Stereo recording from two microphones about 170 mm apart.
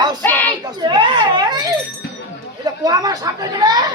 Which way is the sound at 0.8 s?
30° right (ahead or behind).